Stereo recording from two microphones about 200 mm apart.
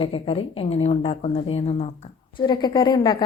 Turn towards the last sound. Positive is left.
turn(degrees=20)  # may be behind; listen again after turning